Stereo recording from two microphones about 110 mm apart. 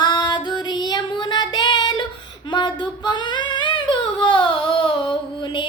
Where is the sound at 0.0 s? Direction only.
40° left (ahead or behind).